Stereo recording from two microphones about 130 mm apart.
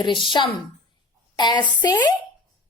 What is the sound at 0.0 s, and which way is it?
Speech, 35° left (ahead or behind).